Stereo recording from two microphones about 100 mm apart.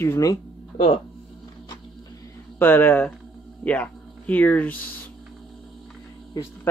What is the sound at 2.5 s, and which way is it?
Speech, 20° left (ahead or behind).